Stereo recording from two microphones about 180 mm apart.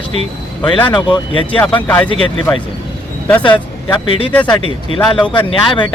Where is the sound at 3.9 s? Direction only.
30° left (ahead or behind).